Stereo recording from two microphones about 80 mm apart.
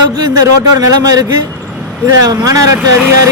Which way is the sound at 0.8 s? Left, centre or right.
Right.